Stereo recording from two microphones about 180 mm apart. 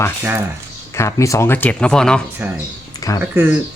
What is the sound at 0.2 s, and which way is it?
Speech, 10° right (ahead or behind).